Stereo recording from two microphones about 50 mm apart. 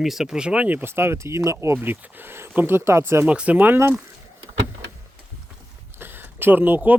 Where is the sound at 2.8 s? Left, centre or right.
Right.